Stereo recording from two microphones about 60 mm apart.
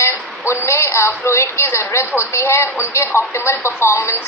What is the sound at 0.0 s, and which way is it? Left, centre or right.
A woman's voice, left.